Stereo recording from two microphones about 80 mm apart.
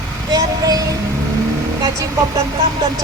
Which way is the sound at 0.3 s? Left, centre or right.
Right.